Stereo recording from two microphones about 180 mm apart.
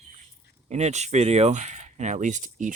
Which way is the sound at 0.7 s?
40° right (ahead or behind).